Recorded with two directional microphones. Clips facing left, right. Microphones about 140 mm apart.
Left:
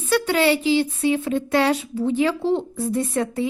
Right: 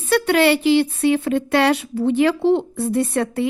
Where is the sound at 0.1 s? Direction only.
65° right (ahead or behind).